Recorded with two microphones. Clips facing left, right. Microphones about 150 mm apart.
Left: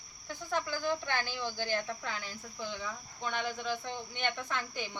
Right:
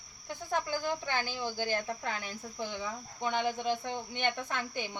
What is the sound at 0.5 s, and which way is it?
Speech, 15° right (ahead or behind).